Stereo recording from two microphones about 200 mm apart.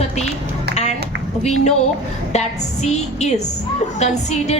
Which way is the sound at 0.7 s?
35° left (ahead or behind).